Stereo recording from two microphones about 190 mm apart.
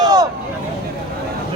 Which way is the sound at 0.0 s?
20° right (ahead or behind).